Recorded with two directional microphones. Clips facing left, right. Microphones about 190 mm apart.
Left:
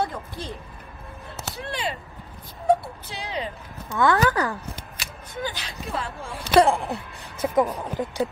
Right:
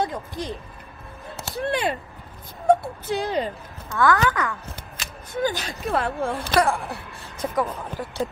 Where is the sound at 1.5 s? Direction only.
55° right (ahead or behind).